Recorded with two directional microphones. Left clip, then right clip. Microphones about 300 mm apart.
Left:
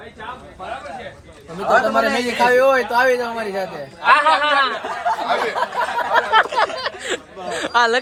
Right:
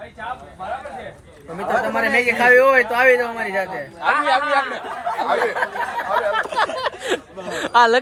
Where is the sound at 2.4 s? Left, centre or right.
Centre.